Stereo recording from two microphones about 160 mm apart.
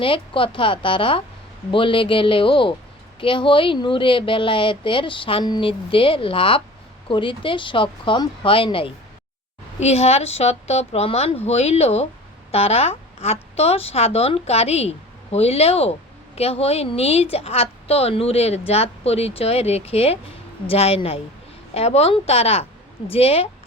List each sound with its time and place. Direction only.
0.0 s speech: 35° left (ahead or behind)